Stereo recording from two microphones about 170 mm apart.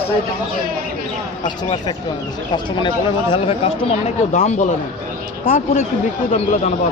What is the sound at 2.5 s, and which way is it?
Speech, 25° left (ahead or behind).